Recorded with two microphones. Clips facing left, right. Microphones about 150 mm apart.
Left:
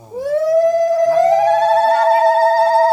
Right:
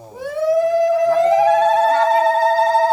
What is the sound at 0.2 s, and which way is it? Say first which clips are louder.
Siren: left 3 dB; 40° left (ahead or behind).